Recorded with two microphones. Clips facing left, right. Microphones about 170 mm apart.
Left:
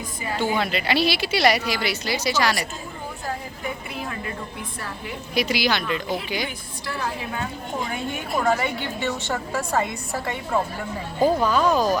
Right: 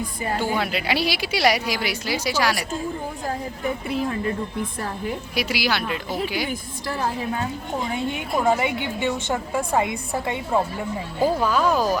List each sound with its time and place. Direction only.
0.5 s a woman's voice: 10° right (ahead or behind)
5.3 s a woman's voice: 10° right (ahead or behind)
6.5 s a woman's voice: 45° right (ahead or behind)
7.9 s a woman's voice: 20° right (ahead or behind)
11.2 s a woman's voice: 5° right (ahead or behind)